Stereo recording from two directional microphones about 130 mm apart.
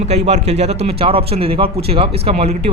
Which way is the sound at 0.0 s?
55° right (ahead or behind).